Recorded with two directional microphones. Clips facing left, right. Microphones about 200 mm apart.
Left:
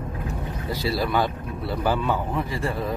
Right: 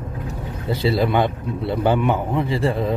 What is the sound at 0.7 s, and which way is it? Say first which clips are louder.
A man's voice: right 6 dB; 25° right (ahead or behind).